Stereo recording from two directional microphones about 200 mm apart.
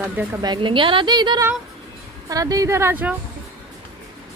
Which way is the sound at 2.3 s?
20° right (ahead or behind).